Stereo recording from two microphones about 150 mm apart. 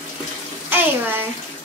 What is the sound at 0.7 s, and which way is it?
Bathtub, 15° right (ahead or behind).